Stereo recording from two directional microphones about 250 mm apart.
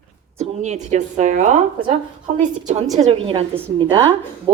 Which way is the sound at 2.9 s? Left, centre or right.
Right.